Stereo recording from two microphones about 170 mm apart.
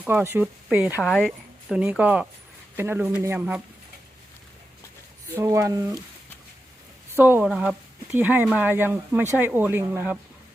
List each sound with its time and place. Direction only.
0.0 s speech: 10° right (ahead or behind)
0.9 s speech: 5° left (ahead or behind)
1.7 s speech: 5° right (ahead or behind)
5.3 s speech: 15° right (ahead or behind)
7.1 s speech: 10° right (ahead or behind)